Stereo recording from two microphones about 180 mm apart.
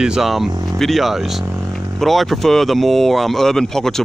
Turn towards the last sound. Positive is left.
turn(degrees=0)  # may be behind; listen again after turning